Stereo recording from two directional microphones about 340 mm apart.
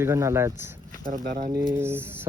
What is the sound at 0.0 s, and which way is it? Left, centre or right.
Speech, centre.